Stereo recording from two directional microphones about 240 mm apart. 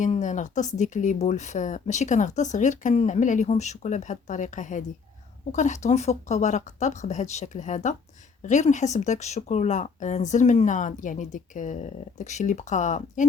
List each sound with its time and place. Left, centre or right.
0.0 s speech: left